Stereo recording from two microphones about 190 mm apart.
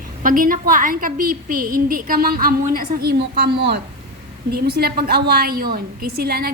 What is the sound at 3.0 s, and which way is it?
A woman's voice, 60° right (ahead or behind).